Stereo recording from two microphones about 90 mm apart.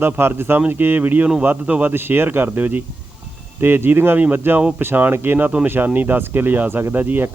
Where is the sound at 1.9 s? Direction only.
25° right (ahead or behind).